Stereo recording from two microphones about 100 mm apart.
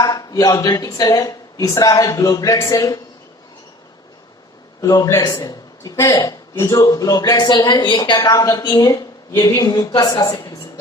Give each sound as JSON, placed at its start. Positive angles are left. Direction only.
{"t": 0.0, "sound": "speech", "side_deg": 40}
{"t": 4.8, "sound": "speech", "side_deg": 35}
{"t": 6.0, "sound": "speech", "side_deg": 30}
{"t": 6.7, "sound": "speech", "side_deg": 40}